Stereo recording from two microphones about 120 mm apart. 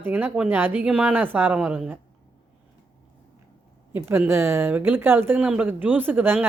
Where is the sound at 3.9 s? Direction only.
15° right (ahead or behind).